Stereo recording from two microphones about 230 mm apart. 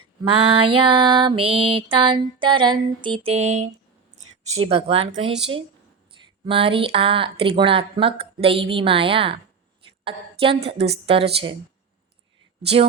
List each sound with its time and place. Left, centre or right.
0.3 s mantra: right
4.1 s speech: right
6.4 s mantra: right
12.6 s mantra: right